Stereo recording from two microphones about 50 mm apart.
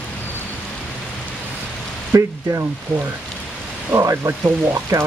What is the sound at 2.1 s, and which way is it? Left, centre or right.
Speech, right.